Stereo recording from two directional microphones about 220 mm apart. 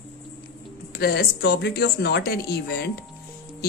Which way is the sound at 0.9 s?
45° left (ahead or behind).